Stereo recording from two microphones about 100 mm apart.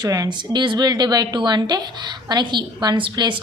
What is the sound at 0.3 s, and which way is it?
A woman's voice, 50° right (ahead or behind).